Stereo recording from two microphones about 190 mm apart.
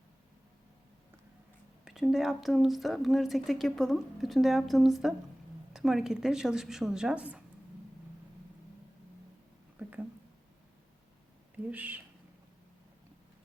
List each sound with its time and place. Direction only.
1.8 s speech: centre (ahead or behind)
9.7 s a sound: 5° right (ahead or behind)
11.7 s speech: 10° right (ahead or behind)